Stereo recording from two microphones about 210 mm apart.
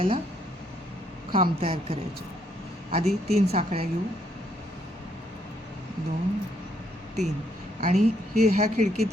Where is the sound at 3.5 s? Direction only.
30° right (ahead or behind).